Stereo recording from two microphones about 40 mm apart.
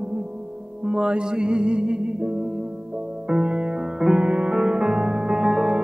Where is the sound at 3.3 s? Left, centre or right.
Right.